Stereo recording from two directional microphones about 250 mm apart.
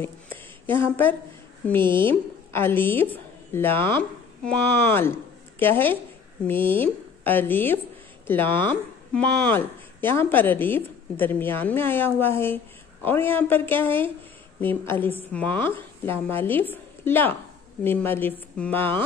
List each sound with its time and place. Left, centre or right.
0.0 s a sound: centre
1.8 s speech: centre
2.0 s a woman's voice: centre